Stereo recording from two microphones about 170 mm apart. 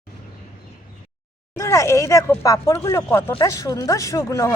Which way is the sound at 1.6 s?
15° left (ahead or behind).